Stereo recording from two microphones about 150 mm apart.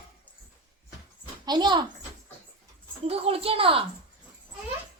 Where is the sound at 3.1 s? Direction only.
40° right (ahead or behind).